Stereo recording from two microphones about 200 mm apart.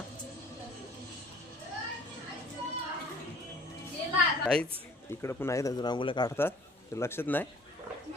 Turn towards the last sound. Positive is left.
turn(degrees=10)  # may be behind; listen again after turning